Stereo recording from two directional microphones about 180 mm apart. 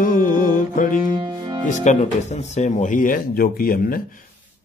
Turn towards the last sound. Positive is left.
turn(degrees=55)  # may be behind; listen again after turning